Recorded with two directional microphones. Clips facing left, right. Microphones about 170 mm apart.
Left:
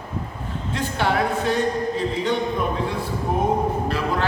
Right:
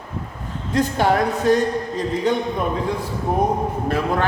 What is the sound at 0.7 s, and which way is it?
Speech, 40° right (ahead or behind).